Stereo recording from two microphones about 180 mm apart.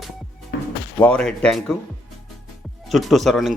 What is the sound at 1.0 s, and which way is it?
Speech, 5° left (ahead or behind).